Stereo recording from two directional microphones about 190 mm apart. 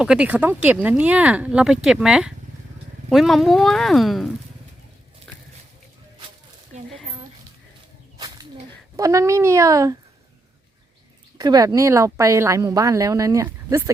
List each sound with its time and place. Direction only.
0.0 s speech: 5° right (ahead or behind)
9.0 s speech: 15° right (ahead or behind)
11.3 s speech: 20° right (ahead or behind)